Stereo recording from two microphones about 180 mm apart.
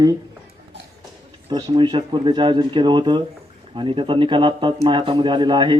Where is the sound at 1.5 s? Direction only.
25° right (ahead or behind).